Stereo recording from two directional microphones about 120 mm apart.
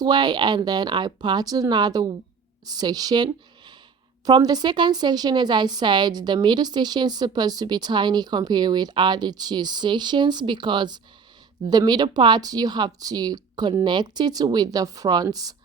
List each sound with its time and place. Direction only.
0.0 s a woman's voice: 35° right (ahead or behind)